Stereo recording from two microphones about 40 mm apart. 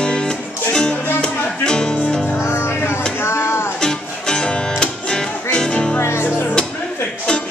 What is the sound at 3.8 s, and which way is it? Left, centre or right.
Music, centre.